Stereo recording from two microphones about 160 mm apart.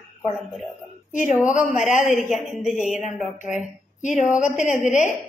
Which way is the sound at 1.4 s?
50° left (ahead or behind).